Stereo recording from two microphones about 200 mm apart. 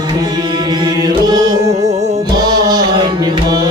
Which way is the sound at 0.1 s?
20° right (ahead or behind).